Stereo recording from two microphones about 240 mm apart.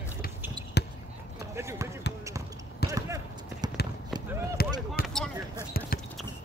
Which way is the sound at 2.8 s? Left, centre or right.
Left.